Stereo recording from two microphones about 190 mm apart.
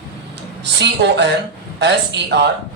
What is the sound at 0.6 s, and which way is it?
Speech, 65° right (ahead or behind).